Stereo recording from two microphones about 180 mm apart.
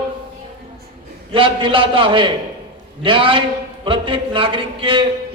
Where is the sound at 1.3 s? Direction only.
30° right (ahead or behind).